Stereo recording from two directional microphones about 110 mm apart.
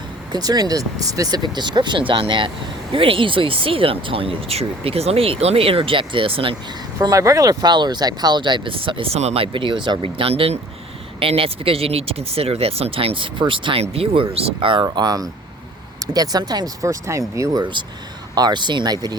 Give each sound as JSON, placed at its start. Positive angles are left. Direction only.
{"t": 0.3, "sound": "speech", "side_deg": -35}
{"t": 7.0, "sound": "speech", "side_deg": -30}
{"t": 13.9, "sound": "speech", "side_deg": -60}
{"t": 14.8, "sound": "speech", "side_deg": -35}